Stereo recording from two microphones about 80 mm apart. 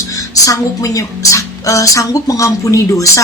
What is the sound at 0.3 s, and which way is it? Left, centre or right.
A woman's voice, left.